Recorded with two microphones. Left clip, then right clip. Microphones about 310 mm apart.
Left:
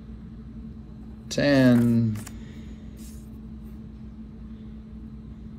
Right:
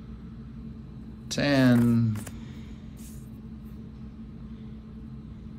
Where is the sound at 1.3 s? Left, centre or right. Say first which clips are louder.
Left 3 dB; centre.